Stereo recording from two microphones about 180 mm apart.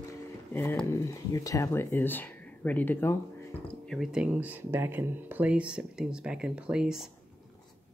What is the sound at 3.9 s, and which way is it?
Speech, centre (ahead or behind).